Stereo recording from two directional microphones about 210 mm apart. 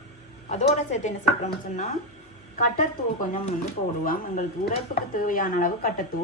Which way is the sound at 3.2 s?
40° left (ahead or behind).